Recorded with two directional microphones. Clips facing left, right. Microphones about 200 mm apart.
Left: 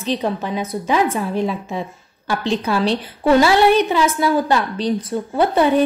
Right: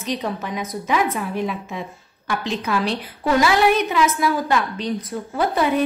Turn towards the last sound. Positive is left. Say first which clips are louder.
# left 5 dB
turn(degrees=30)  # may be behind; listen again after turning